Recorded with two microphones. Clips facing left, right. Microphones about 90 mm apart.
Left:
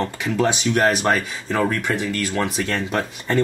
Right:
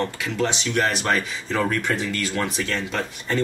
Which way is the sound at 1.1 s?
5° left (ahead or behind).